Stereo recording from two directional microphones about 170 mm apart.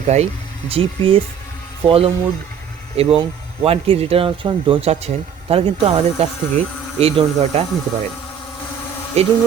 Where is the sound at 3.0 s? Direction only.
35° right (ahead or behind).